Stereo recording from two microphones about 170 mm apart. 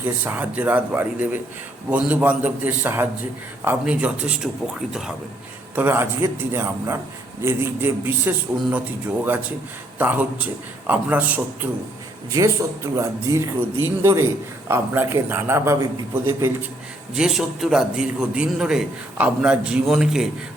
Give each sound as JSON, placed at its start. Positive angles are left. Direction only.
{"t": 0.0, "sound": "a man's voice", "side_deg": -10}
{"t": 10.0, "sound": "speech", "side_deg": -10}
{"t": 17.2, "sound": "a man's voice", "side_deg": 0}